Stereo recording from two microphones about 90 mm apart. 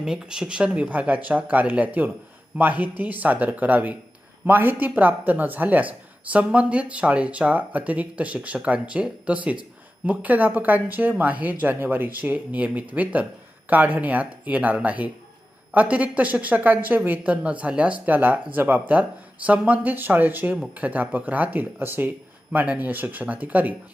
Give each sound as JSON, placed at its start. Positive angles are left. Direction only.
{"t": 0.0, "sound": "speech", "side_deg": -10}